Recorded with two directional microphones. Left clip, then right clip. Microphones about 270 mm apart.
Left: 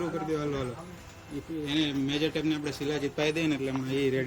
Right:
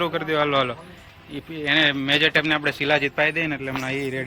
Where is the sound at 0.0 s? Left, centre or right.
Centre.